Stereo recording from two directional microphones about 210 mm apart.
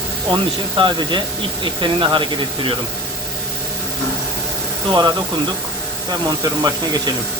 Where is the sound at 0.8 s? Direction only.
20° right (ahead or behind).